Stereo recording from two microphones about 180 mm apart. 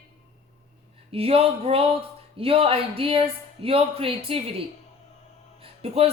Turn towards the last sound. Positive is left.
turn(degrees=-35)  # may be behind; listen again after turning